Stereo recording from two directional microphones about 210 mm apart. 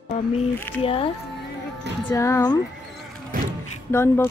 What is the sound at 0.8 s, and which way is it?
Speech, 25° left (ahead or behind).